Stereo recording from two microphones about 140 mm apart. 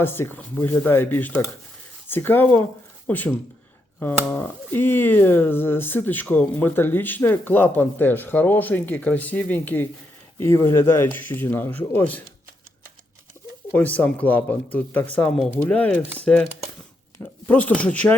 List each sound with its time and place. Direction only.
0.0 s speech: 15° left (ahead or behind)
13.7 s speech: 10° left (ahead or behind)